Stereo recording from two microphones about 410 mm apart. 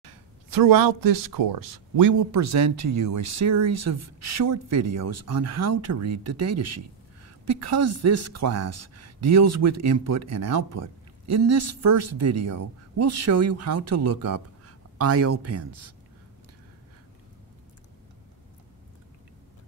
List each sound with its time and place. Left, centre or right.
0.0 s speech: right